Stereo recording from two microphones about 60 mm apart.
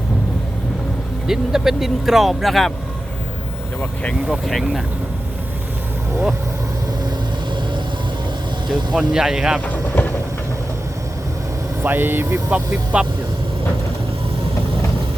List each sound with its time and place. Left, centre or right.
1.3 s speech: centre
4.4 s speech: centre
9.0 s speech: centre
9.6 s speech: left
11.8 s speech: right
12.5 s speech: right